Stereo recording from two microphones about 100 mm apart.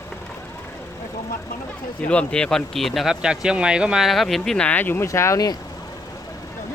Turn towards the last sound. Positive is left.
turn(degrees=35)  # may be behind; listen again after turning